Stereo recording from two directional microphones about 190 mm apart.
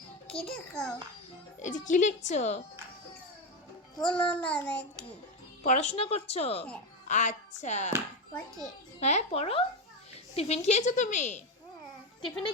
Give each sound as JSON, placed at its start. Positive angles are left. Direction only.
{"t": 0.3, "sound": "a child's voice", "side_deg": 5}
{"t": 1.5, "sound": "speech", "side_deg": 40}
{"t": 4.1, "sound": "child singing", "side_deg": 5}
{"t": 5.6, "sound": "speech", "side_deg": 40}
{"t": 9.0, "sound": "speech", "side_deg": 35}